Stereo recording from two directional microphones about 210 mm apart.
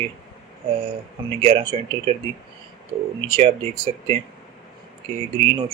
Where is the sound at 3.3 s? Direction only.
25° right (ahead or behind).